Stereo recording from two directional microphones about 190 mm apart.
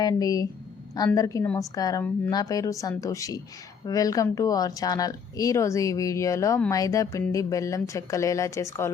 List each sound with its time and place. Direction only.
0.0 s speech: 20° left (ahead or behind)